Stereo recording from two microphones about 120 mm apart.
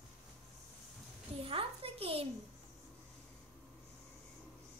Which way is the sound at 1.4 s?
50° right (ahead or behind).